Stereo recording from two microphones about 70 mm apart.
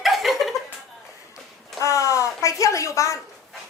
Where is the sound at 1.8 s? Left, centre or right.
Left.